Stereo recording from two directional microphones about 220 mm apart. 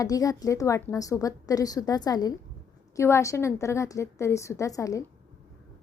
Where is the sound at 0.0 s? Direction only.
15° left (ahead or behind).